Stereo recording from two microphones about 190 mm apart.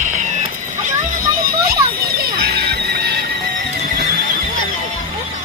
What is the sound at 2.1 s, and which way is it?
Music, 55° right (ahead or behind).